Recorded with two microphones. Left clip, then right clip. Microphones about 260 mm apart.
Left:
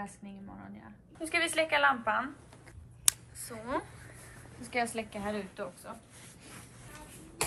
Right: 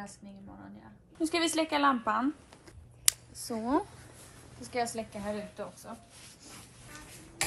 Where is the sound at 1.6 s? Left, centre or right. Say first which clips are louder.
Left 4 dB; right.